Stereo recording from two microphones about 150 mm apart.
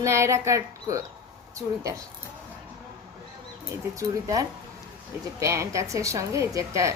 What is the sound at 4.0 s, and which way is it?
A woman's voice, 20° right (ahead or behind).